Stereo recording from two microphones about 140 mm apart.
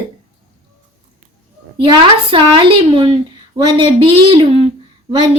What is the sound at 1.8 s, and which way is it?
A woman's voice, 35° right (ahead or behind).